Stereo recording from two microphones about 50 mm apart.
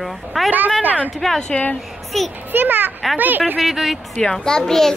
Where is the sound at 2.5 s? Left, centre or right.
Right.